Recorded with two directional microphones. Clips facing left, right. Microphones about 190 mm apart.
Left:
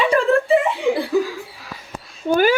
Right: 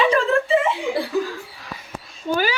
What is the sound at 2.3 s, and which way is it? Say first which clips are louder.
Speech: left 6 dB; 50° left (ahead or behind).